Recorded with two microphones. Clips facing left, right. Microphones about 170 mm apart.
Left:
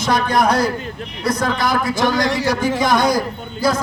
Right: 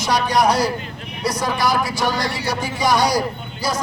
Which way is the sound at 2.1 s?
90° left.